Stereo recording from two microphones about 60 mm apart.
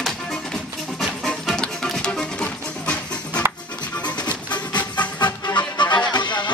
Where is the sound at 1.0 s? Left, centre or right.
Centre; by 5.0 s left.